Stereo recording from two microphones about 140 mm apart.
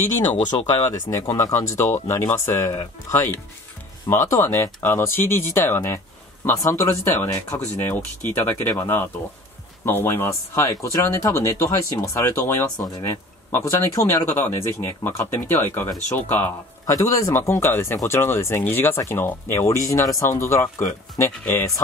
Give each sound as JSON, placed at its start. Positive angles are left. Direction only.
{"t": 0.7, "sound": "speech", "side_deg": 20}